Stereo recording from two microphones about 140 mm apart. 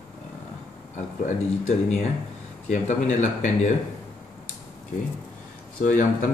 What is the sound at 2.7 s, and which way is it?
Speech, 60° left (ahead or behind).